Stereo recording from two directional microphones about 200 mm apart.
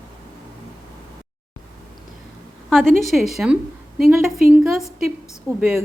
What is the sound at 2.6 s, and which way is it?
A woman's voice, centre (ahead or behind).